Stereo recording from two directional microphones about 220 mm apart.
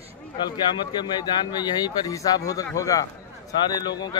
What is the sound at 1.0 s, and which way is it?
A man's voice, 20° left (ahead or behind).